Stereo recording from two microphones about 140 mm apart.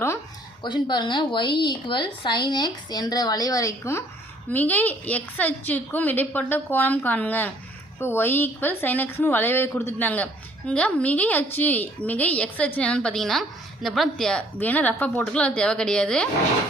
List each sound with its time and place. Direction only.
0.6 s a woman's voice: 35° left (ahead or behind); by 16.3 s 5° left (ahead or behind)